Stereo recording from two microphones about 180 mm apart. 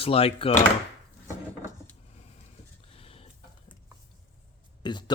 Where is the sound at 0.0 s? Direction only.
35° left (ahead or behind).